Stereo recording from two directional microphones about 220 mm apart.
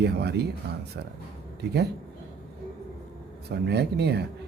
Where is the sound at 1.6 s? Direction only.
50° right (ahead or behind).